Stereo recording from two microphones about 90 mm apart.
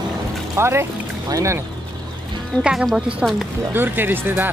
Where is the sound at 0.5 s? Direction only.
30° right (ahead or behind).